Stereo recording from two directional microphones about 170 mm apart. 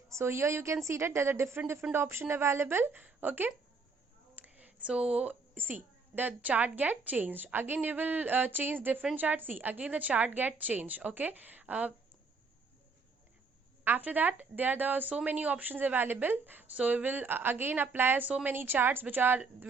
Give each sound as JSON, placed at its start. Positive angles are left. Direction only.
{"t": 0.1, "sound": "a woman's voice", "side_deg": -15}
{"t": 13.8, "sound": "a woman's voice", "side_deg": -10}